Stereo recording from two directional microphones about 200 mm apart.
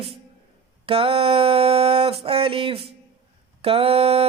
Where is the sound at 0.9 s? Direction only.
30° right (ahead or behind).